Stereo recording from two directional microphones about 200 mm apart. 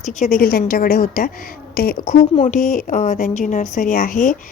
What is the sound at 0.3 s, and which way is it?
A woman's voice, 45° left (ahead or behind).